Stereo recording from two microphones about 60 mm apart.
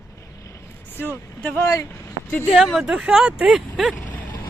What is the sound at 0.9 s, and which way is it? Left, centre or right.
Speech, left.